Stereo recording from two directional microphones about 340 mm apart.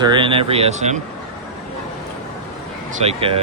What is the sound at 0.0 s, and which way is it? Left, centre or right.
Speech, centre.